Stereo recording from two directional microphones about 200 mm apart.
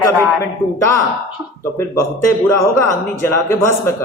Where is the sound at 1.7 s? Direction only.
15° left (ahead or behind).